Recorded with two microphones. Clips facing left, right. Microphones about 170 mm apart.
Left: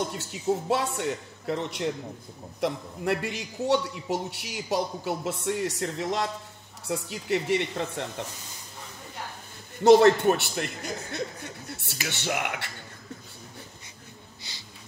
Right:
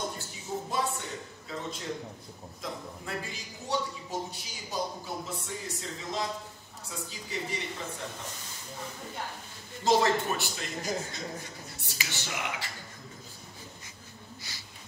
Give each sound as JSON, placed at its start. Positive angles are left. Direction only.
{"t": 0.1, "sound": "a man's voice", "side_deg": 75}
{"t": 9.8, "sound": "a man's voice", "side_deg": 65}